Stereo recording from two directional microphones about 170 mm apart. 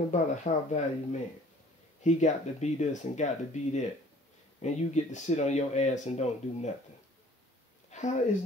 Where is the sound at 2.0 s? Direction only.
45° left (ahead or behind).